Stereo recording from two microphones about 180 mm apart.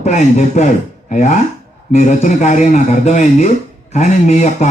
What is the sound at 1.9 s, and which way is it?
Speech, 40° left (ahead or behind).